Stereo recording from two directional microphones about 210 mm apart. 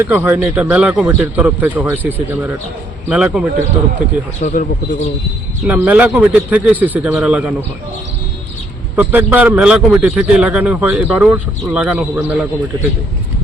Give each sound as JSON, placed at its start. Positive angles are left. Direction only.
{"t": 0.0, "sound": "a man's voice", "side_deg": -10}
{"t": 4.4, "sound": "speech", "side_deg": 35}
{"t": 5.6, "sound": "a man's voice", "side_deg": -5}
{"t": 9.0, "sound": "a man's voice", "side_deg": -10}